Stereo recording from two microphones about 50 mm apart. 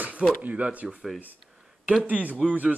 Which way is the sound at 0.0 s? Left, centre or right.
Right.